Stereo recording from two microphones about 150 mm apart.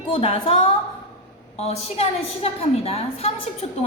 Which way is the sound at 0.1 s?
35° left (ahead or behind).